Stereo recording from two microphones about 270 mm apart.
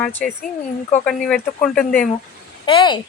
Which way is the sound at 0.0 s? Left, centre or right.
Centre.